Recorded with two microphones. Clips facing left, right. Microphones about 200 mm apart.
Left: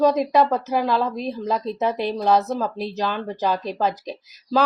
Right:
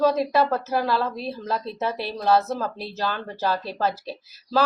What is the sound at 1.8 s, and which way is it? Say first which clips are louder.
Speech: left 5 dB; 15° left (ahead or behind).